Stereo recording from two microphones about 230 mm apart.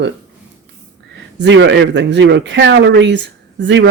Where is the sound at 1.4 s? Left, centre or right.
Right.